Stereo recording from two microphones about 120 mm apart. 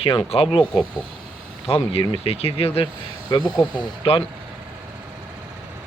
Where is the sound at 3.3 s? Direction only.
40° left (ahead or behind).